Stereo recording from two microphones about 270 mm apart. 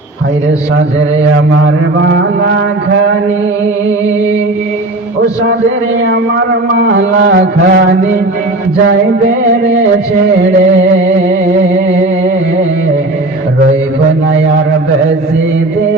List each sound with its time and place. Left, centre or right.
6.7 s mantra: right